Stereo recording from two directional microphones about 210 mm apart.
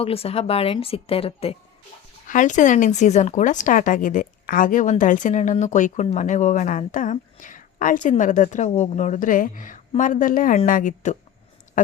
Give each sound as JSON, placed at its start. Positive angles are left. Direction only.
{"t": 0.0, "sound": "a woman's voice", "side_deg": 30}